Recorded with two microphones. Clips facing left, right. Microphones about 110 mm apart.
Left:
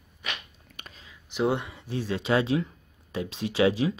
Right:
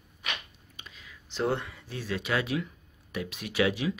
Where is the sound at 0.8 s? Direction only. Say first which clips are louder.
Left 3 dB; 60° left (ahead or behind).